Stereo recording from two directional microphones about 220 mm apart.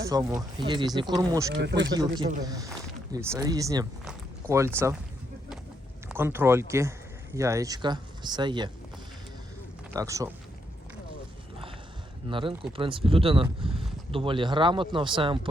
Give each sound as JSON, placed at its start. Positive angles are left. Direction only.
{"t": 0.0, "sound": "speech", "side_deg": -15}
{"t": 1.5, "sound": "speech", "side_deg": -50}
{"t": 2.4, "sound": "speech", "side_deg": -15}
{"t": 6.1, "sound": "speech", "side_deg": -10}
{"t": 9.9, "sound": "speech", "side_deg": -15}
{"t": 12.3, "sound": "speech", "side_deg": -25}